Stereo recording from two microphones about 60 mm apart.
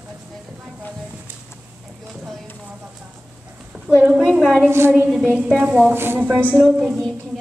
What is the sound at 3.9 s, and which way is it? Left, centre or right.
Speech, right.